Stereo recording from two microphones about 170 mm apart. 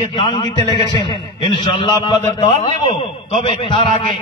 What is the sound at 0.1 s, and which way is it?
A man's voice, 30° left (ahead or behind).